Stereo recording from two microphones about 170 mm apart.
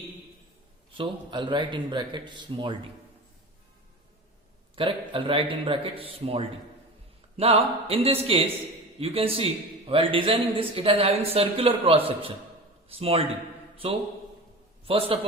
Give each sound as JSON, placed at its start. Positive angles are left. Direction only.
{"t": 0.9, "sound": "a man's voice", "side_deg": -25}
{"t": 4.7, "sound": "speech", "side_deg": -30}
{"t": 14.8, "sound": "speech", "side_deg": -35}